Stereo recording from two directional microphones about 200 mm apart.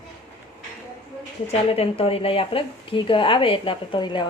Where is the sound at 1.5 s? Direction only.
30° left (ahead or behind).